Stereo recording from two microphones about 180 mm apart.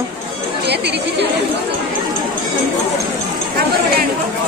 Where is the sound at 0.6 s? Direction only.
70° right (ahead or behind).